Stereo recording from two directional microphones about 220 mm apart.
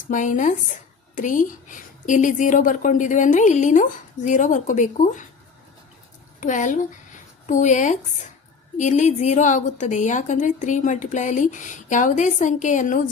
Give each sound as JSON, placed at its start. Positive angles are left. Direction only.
{"t": 0.1, "sound": "a woman's voice", "side_deg": 35}
{"t": 6.4, "sound": "a woman's voice", "side_deg": 35}